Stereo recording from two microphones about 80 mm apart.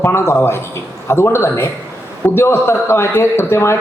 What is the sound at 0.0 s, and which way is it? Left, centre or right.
A man's voice, left.